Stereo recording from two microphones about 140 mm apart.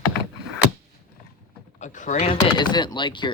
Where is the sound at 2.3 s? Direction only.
30° left (ahead or behind).